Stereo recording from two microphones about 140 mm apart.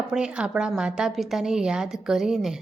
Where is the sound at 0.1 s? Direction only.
5° right (ahead or behind).